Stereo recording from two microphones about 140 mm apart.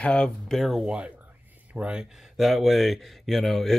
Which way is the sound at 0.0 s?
5° left (ahead or behind).